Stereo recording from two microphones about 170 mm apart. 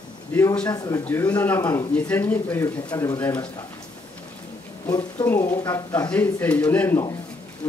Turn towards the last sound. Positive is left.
turn(degrees=10)  # may be behind; listen again after turning